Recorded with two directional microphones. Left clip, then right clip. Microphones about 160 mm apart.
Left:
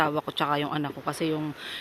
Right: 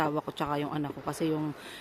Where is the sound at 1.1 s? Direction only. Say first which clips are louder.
Left 2 dB; 10° right (ahead or behind).